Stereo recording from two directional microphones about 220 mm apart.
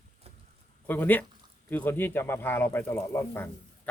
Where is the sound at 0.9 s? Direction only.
10° left (ahead or behind).